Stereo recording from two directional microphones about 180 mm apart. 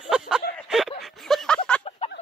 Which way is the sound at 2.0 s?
35° left (ahead or behind).